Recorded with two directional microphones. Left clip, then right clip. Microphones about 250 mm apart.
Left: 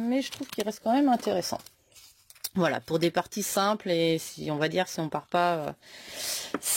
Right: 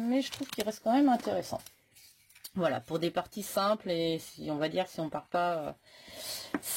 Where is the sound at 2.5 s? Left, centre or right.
Left.